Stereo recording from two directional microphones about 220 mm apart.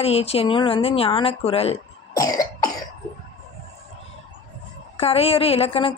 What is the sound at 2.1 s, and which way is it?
Cough, 15° left (ahead or behind).